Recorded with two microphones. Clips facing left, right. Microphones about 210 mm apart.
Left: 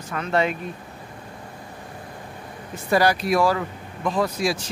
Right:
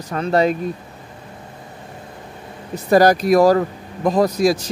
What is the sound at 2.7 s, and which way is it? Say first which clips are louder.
Speech: right 7 dB; 40° right (ahead or behind).